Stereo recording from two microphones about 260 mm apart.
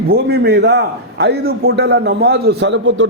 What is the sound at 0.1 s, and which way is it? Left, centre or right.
A man's voice, right.